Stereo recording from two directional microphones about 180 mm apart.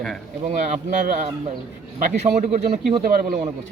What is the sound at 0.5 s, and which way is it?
Speech, 45° right (ahead or behind).